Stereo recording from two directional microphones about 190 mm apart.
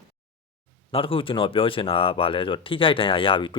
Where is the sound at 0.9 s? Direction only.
30° left (ahead or behind).